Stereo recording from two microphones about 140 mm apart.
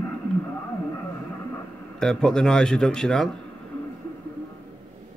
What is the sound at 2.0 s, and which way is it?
Speech, 5° left (ahead or behind).